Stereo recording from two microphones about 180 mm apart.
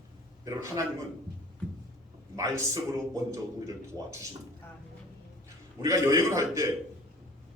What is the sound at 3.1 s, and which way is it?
A man's voice, 20° right (ahead or behind).